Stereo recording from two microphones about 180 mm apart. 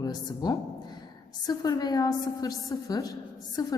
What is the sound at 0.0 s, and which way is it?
A woman's voice, 20° left (ahead or behind).